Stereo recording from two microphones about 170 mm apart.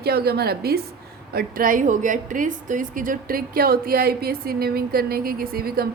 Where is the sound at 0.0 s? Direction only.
65° right (ahead or behind).